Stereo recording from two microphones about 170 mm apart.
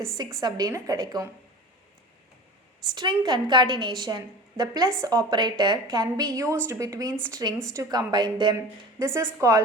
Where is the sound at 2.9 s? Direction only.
25° right (ahead or behind).